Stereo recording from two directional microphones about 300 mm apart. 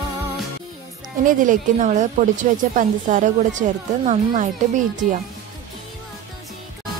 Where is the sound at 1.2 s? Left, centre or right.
Right.